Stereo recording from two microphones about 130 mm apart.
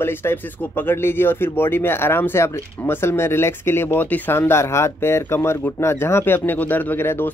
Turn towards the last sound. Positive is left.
turn(degrees=15)  # may be behind; listen again after turning